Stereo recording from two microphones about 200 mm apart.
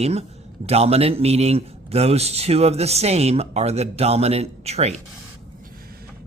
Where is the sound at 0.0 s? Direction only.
30° right (ahead or behind).